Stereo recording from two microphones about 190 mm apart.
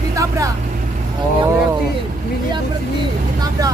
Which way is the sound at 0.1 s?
15° right (ahead or behind).